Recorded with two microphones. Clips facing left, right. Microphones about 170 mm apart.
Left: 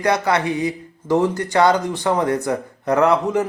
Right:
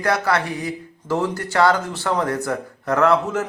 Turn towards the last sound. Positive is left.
turn(degrees=15)  # may be behind; listen again after turning